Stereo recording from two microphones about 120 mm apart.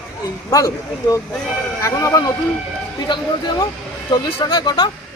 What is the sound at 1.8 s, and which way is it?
Speech, 25° left (ahead or behind).